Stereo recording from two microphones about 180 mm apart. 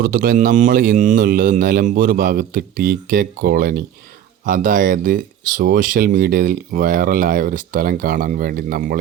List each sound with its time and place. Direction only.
0.0 s speech: 50° right (ahead or behind)